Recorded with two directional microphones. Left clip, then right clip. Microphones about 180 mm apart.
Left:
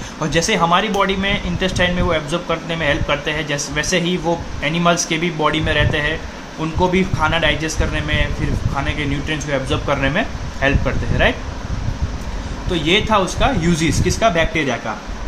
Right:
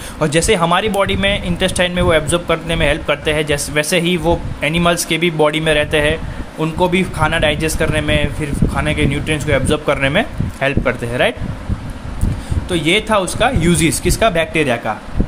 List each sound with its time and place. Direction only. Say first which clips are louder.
0.2 s speech: right 3 dB; 45° right (ahead or behind)
12.7 s speech: right 1 dB; 45° right (ahead or behind)